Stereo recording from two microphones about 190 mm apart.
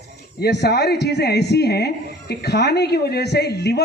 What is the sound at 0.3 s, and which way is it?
Speech, 60° left (ahead or behind).